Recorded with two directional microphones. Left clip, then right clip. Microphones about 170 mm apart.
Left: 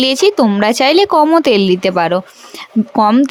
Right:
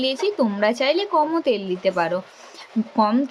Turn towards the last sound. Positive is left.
turn(degrees=65)  # may be behind; listen again after turning